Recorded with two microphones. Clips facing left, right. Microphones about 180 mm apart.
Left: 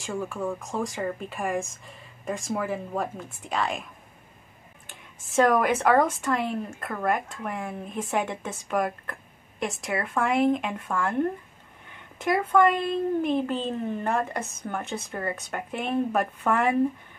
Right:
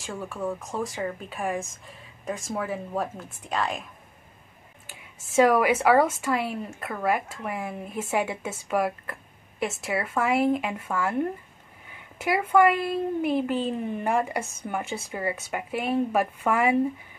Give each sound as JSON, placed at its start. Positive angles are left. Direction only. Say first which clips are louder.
{"t": 0.0, "sound": "speech", "louder": "left 2 dB", "side_deg": 0}
{"t": 4.8, "sound": "a woman's voice", "louder": "right 1 dB", "side_deg": -5}